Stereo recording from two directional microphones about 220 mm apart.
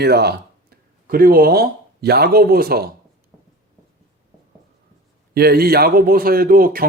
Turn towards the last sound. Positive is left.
turn(degrees=-40)  # may be behind; listen again after turning